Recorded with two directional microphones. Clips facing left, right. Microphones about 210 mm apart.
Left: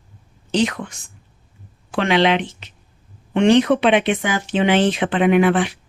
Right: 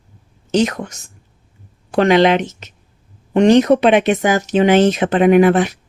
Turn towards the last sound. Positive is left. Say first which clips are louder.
# right 4 dB
turn(degrees=-45)  # may be behind; listen again after turning